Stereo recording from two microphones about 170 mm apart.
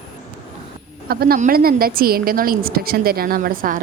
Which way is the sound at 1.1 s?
65° right (ahead or behind).